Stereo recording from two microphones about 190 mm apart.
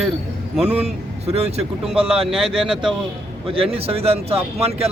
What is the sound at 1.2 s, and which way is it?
A man's voice, 35° right (ahead or behind).